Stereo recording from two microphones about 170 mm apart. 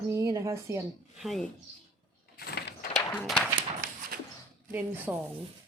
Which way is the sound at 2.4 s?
70° left (ahead or behind).